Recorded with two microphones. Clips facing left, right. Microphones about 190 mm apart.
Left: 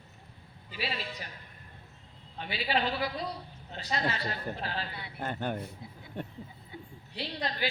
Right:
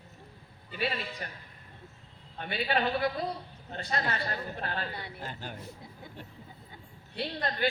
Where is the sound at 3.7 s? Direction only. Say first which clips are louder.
Even; 55° right (ahead or behind).